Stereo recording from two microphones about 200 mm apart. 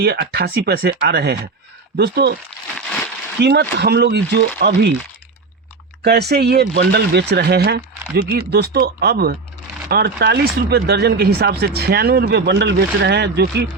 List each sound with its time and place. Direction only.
0.0 s speech: 55° right (ahead or behind)
3.4 s speech: 55° right (ahead or behind)
6.0 s speech: 55° right (ahead or behind)